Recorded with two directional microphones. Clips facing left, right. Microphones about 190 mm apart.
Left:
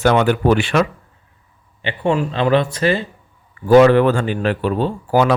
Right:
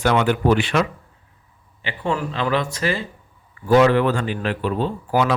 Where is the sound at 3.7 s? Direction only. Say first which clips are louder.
Left 5 dB; 45° left (ahead or behind).